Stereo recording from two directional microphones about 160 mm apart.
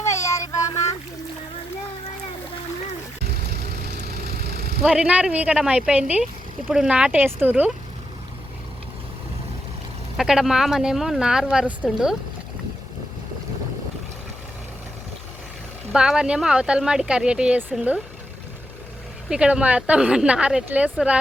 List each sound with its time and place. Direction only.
0.0 s a sound: 20° left (ahead or behind)
3.8 s vehicle: 85° right
4.8 s a woman's voice: 5° right (ahead or behind)
10.2 s speech: centre (ahead or behind)
15.9 s speech: 5° right (ahead or behind)
19.3 s a woman's voice: 5° right (ahead or behind)